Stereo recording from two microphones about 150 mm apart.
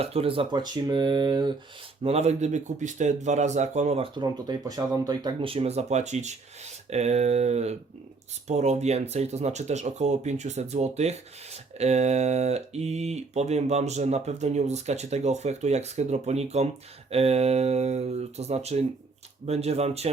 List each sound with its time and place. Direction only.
0.0 s speech: 40° right (ahead or behind)
2.0 s speech: 45° right (ahead or behind)